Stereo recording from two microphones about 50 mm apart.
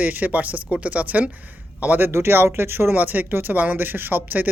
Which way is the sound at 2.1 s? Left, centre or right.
Right.